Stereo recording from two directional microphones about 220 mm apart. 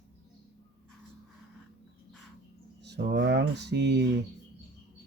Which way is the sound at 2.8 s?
50° right (ahead or behind).